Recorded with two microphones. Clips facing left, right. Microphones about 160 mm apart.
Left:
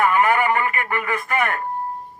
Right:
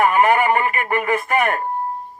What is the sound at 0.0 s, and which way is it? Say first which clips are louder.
Speech: right 2 dB; 25° right (ahead or behind).